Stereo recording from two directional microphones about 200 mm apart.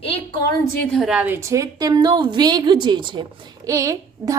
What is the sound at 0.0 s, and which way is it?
Speech, 25° left (ahead or behind).